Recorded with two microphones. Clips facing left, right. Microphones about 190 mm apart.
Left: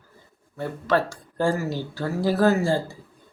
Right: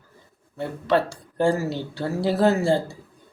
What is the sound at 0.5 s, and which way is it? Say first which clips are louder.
Speech: right 1 dB; 20° right (ahead or behind).